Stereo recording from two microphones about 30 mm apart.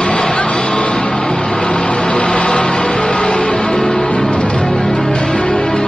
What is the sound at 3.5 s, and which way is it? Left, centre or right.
Music, left.